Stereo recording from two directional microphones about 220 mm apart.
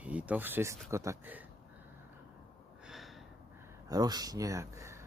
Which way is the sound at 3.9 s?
20° right (ahead or behind).